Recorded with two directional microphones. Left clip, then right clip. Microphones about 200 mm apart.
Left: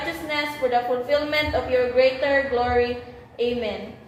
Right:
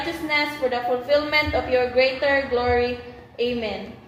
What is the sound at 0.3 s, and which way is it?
A woman's voice, 30° right (ahead or behind).